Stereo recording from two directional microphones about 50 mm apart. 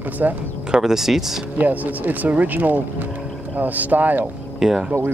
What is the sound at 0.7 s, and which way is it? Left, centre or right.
Speech, centre.